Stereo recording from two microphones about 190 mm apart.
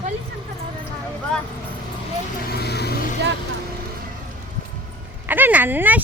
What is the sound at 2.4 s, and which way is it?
Speech, 55° left (ahead or behind).